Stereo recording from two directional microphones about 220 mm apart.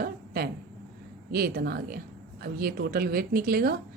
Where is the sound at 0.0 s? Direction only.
45° right (ahead or behind).